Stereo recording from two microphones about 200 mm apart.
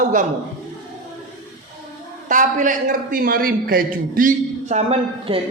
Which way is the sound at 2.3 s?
40° right (ahead or behind).